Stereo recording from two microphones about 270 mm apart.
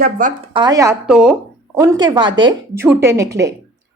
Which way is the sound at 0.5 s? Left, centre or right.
Centre.